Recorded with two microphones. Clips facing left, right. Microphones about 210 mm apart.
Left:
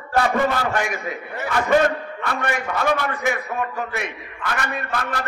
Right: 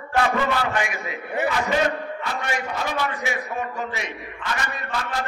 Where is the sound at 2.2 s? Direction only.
60° left (ahead or behind).